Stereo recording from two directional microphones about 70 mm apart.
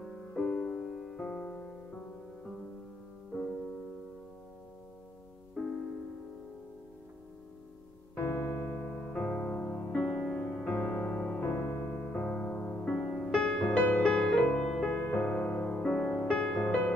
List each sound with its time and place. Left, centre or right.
0.0 s music: centre
5.6 s music: centre
8.2 s electric piano: left; by 11.4 s centre
11.4 s music: left
12.0 s music: left
13.3 s music: centre
15.1 s music: left
15.6 s music: centre
16.3 s music: centre